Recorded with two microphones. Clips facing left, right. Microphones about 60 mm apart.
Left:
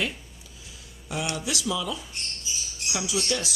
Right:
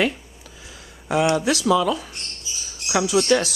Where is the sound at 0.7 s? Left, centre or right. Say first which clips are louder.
Right 11 dB; right.